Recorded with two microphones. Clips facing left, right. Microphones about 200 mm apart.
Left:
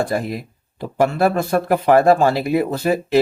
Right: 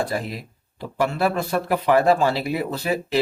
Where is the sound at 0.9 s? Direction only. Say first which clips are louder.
Left 5 dB; 45° left (ahead or behind).